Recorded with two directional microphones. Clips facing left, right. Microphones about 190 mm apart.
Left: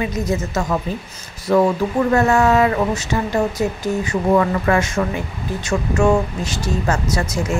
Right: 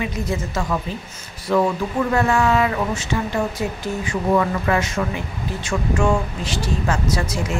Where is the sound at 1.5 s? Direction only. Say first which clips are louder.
Left 4 dB; 45° left (ahead or behind).